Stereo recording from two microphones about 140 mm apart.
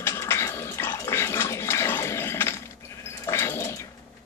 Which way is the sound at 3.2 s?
20° left (ahead or behind).